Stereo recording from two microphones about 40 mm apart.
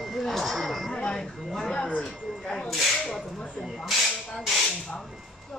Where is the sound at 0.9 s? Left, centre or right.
Left.